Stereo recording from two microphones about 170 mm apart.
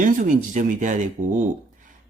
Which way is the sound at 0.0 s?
50° right (ahead or behind).